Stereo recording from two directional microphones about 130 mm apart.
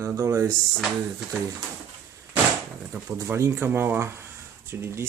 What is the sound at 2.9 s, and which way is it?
Speech, 20° right (ahead or behind).